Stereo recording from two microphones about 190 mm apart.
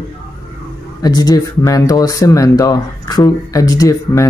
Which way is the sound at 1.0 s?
20° left (ahead or behind).